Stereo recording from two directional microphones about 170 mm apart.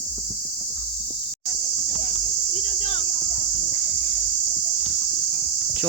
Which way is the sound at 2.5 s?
40° left (ahead or behind).